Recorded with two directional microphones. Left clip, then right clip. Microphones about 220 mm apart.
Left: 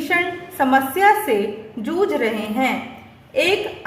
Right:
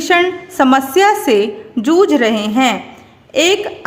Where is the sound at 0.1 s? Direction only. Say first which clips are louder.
Right 8 dB; 50° right (ahead or behind).